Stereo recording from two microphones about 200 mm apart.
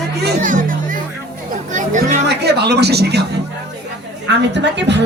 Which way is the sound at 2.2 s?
55° right (ahead or behind).